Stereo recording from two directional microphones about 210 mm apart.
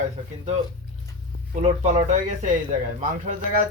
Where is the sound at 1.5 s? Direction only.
35° right (ahead or behind).